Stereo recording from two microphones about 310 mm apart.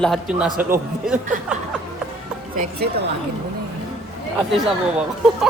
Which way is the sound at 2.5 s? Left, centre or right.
Right.